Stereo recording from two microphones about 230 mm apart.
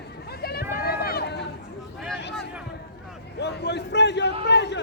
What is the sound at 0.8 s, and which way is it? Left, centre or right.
Run, left.